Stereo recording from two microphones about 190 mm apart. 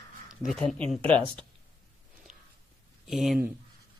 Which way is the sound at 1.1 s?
25° right (ahead or behind).